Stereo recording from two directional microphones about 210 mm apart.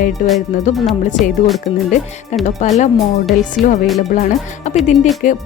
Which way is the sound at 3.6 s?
Centre (ahead or behind).